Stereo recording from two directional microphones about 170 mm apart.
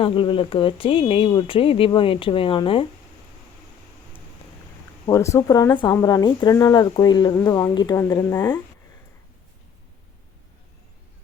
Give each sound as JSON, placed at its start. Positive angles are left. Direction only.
{"t": 0.0, "sound": "speech", "side_deg": 30}
{"t": 5.0, "sound": "speech", "side_deg": 15}